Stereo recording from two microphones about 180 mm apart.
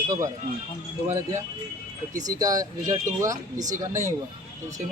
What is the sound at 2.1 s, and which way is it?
Speech, 20° right (ahead or behind).